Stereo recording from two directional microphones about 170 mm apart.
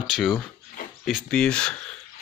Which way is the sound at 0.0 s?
5° right (ahead or behind).